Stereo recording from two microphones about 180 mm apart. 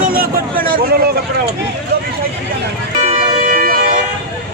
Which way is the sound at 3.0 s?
35° right (ahead or behind).